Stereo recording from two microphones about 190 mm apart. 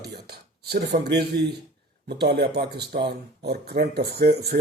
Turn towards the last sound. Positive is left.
turn(degrees=-55)  # may be behind; listen again after turning